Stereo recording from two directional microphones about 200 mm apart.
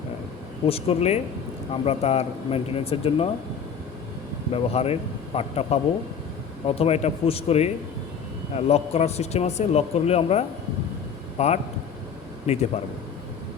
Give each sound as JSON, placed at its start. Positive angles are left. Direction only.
{"t": 0.7, "sound": "speech", "side_deg": 30}
{"t": 4.5, "sound": "speech", "side_deg": 30}